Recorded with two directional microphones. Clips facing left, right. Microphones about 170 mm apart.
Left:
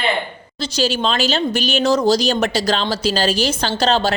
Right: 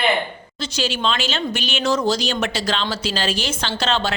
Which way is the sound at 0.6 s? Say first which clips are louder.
Left 4 dB; 35° left (ahead or behind).